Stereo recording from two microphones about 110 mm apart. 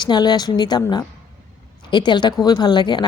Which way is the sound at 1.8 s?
45° left (ahead or behind).